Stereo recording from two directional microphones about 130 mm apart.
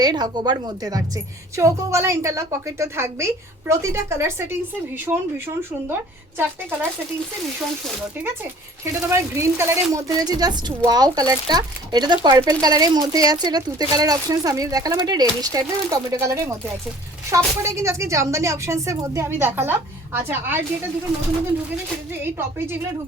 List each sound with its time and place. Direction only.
0.0 s a woman's voice: 30° right (ahead or behind)
8.8 s a woman's voice: 20° right (ahead or behind)
22.1 s speech: 15° right (ahead or behind)